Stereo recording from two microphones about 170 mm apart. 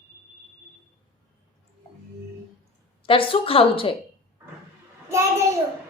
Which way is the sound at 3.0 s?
30° left (ahead or behind).